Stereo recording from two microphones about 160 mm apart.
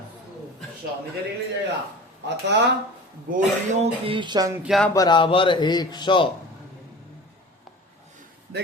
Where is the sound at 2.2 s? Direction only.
90° right.